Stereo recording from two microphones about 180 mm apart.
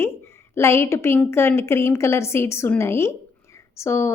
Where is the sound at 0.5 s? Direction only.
15° left (ahead or behind).